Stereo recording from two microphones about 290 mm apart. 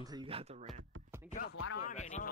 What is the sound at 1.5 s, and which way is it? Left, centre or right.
Speech, left.